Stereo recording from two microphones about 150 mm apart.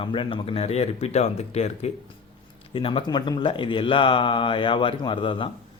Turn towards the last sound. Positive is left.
turn(degrees=35)  # may be behind; listen again after turning